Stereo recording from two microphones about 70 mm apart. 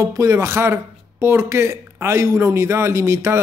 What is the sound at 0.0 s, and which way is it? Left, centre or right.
Speech, right.